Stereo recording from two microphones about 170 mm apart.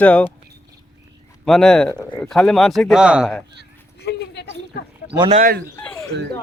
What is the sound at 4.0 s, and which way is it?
Speech, 80° left.